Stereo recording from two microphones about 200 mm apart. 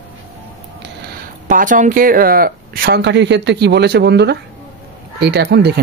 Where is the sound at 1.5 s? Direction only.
40° right (ahead or behind).